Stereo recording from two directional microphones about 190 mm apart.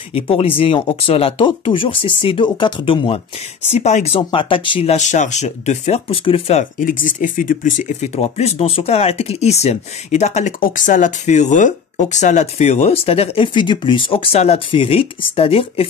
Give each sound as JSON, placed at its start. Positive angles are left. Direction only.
{"t": 0.1, "sound": "speech", "side_deg": 30}
{"t": 6.8, "sound": "speech", "side_deg": 45}